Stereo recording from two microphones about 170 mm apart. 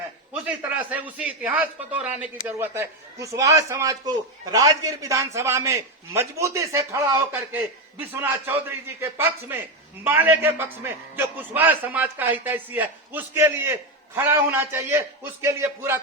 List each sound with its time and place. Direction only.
0.4 s speech: 10° right (ahead or behind)